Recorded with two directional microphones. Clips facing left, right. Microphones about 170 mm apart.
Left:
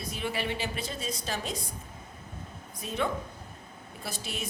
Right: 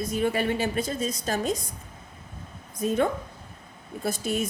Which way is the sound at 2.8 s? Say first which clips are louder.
Right 7 dB; 45° right (ahead or behind).